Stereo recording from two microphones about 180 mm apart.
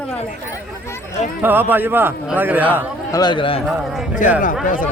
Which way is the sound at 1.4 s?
10° right (ahead or behind).